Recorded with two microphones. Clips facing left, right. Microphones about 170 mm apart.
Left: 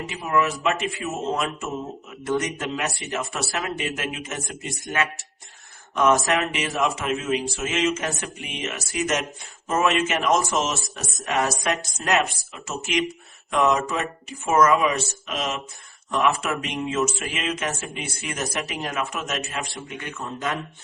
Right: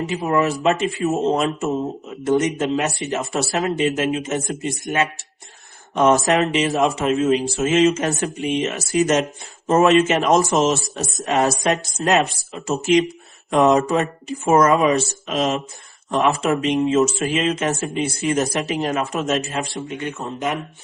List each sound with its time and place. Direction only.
0.2 s speech: 30° right (ahead or behind)